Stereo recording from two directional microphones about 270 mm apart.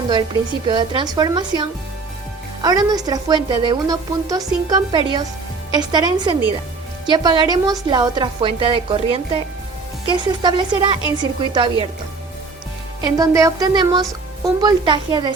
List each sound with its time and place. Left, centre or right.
0.7 s a woman's voice: centre
13.0 s a woman's voice: centre